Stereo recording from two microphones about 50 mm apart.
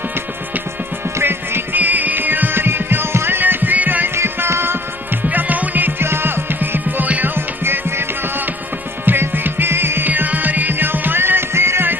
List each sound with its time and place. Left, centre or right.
1.2 s music: right
4.1 s music: right
5.3 s music: right
7.1 s music: right
7.3 s music: right
9.0 s music: right
10.0 s music: right